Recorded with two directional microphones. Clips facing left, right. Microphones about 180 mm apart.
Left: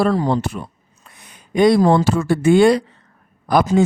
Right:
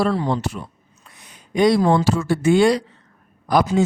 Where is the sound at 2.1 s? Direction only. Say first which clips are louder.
Left 2 dB; 55° left (ahead or behind).